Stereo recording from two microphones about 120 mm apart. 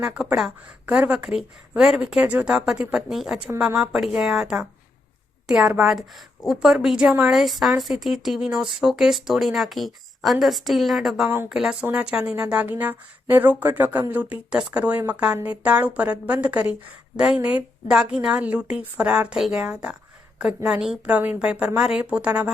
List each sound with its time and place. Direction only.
0.0 s a woman's voice: 10° right (ahead or behind)